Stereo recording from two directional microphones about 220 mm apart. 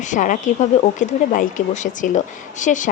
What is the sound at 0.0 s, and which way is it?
Speech, 35° left (ahead or behind).